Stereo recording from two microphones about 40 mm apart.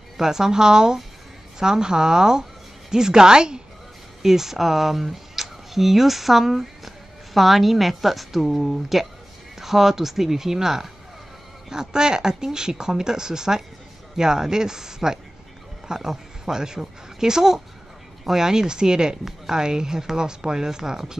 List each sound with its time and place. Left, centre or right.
0.2 s speech: centre
4.2 s a woman's voice: centre
9.6 s speech: centre